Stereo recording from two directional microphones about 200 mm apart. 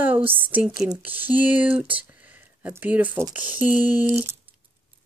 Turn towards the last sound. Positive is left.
turn(degrees=-10)  # may be behind; listen again after turning